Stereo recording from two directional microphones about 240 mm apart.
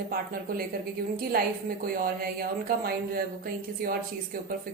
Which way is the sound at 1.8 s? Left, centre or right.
Right.